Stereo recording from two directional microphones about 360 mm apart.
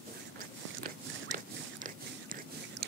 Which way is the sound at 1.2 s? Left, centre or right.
Right.